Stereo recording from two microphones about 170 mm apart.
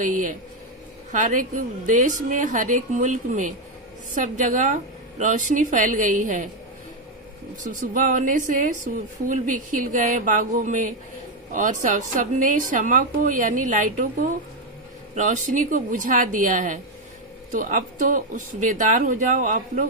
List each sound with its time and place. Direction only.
0.0 s a woman's voice: 50° right (ahead or behind)
7.6 s a woman's voice: 50° right (ahead or behind)